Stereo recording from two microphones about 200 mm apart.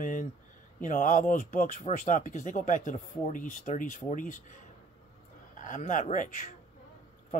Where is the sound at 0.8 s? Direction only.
40° left (ahead or behind).